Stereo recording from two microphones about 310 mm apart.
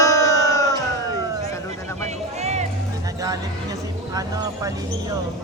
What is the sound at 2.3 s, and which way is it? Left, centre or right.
Music, right.